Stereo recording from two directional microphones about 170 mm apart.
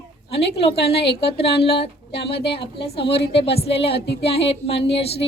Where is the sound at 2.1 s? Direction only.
75° left (ahead or behind).